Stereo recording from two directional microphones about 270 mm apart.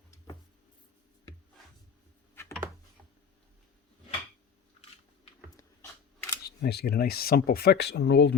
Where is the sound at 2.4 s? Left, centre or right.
Centre.